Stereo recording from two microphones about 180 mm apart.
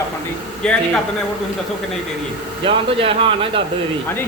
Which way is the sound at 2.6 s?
30° right (ahead or behind).